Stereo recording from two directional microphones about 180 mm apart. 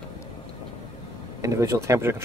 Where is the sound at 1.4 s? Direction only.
15° right (ahead or behind).